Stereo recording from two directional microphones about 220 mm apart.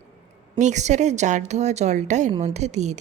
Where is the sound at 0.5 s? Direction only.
30° right (ahead or behind).